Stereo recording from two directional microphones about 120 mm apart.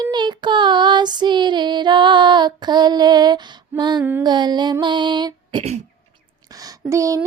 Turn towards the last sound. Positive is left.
turn(degrees=-25)  # may be behind; listen again after turning